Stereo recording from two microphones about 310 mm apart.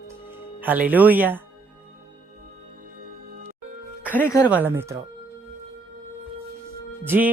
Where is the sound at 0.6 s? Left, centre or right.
Centre.